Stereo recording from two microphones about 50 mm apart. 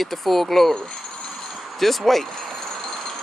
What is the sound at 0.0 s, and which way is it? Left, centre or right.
Speech, centre.